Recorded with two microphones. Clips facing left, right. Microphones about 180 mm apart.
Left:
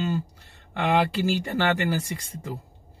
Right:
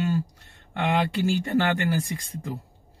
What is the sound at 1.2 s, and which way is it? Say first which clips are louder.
Speech: right 2 dB; 75° left (ahead or behind).